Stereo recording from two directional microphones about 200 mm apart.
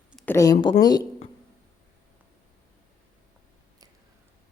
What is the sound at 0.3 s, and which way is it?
Speech, 15° left (ahead or behind).